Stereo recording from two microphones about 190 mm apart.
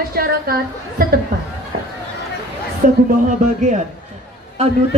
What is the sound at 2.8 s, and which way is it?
Speech, 45° right (ahead or behind).